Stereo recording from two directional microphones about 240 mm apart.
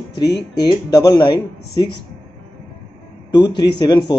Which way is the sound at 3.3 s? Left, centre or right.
Centre.